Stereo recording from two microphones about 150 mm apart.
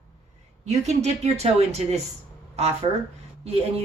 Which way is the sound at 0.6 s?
50° right (ahead or behind).